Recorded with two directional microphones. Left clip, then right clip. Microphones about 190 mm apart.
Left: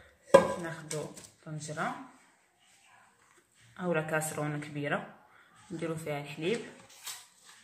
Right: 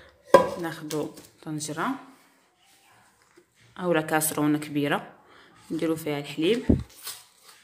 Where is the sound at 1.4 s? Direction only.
55° right (ahead or behind).